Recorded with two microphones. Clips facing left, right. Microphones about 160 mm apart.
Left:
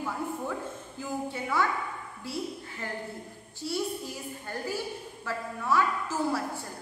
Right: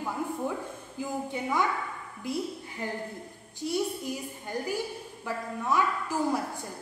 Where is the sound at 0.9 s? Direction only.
15° right (ahead or behind).